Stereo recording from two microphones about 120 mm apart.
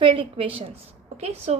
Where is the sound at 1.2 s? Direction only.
60° right (ahead or behind).